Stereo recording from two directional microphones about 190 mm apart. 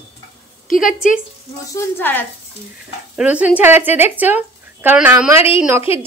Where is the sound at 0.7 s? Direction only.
45° left (ahead or behind).